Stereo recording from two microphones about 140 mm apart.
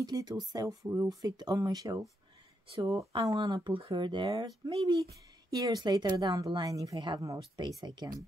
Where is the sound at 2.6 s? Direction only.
40° right (ahead or behind).